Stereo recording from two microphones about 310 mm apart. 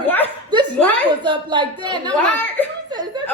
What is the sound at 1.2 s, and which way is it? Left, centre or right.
Speech, centre.